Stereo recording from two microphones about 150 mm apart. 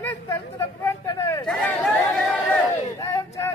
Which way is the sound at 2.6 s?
20° left (ahead or behind).